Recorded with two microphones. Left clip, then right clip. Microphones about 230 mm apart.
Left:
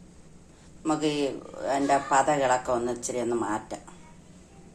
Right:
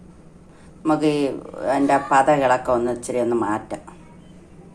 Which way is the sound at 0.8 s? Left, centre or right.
Centre.